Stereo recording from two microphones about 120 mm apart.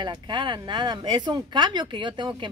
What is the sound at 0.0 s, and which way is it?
Speech, 40° right (ahead or behind).